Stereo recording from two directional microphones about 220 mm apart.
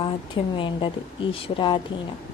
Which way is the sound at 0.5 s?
20° left (ahead or behind).